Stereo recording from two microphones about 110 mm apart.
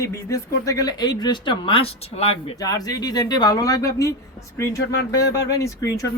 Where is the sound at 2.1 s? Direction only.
70° left (ahead or behind).